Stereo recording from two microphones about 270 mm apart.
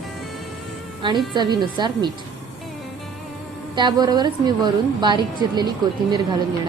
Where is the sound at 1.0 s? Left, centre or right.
Centre.